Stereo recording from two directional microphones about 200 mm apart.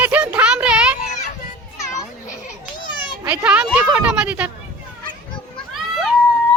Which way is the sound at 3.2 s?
5° right (ahead or behind).